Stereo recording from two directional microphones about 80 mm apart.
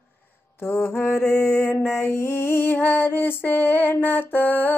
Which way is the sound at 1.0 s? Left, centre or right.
Left.